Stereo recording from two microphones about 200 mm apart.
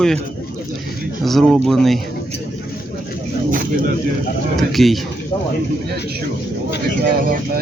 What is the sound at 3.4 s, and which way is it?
Speech, 45° right (ahead or behind).